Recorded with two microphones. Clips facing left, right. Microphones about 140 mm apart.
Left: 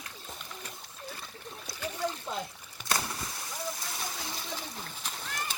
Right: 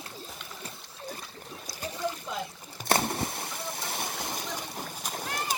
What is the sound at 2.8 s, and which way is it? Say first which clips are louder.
Splash: right 7 dB; 60° right (ahead or behind).